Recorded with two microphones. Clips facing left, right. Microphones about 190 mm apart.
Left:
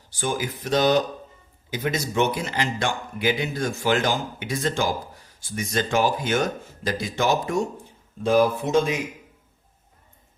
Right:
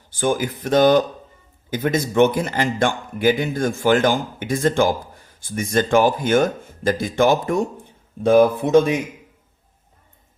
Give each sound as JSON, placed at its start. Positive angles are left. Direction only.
{"t": 0.1, "sound": "speech", "side_deg": -55}